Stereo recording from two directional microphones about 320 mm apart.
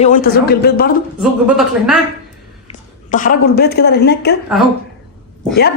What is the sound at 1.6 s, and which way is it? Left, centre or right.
Speech, centre.